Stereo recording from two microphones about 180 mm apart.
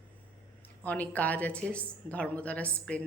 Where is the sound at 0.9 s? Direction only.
10° left (ahead or behind).